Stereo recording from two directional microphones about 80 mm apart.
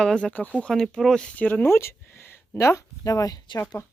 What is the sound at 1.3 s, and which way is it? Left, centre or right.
Speech, left.